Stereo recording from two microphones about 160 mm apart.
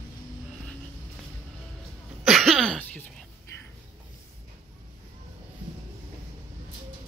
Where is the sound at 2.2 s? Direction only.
Centre (ahead or behind).